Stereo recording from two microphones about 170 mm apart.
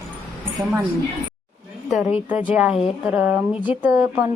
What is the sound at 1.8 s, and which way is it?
Speech, centre (ahead or behind).